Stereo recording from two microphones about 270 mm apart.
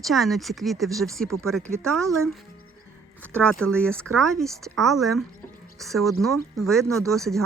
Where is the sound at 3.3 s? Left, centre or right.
Centre.